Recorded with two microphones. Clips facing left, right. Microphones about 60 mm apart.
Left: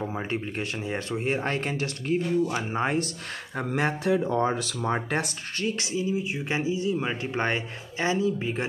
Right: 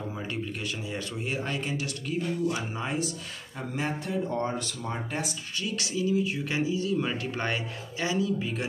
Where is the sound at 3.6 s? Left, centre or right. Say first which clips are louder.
Left 5 dB; left.